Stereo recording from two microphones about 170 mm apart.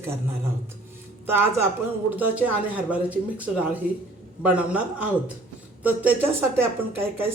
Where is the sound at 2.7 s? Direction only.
10° right (ahead or behind).